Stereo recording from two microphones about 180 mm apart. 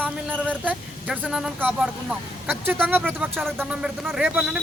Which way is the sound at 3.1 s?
10° right (ahead or behind).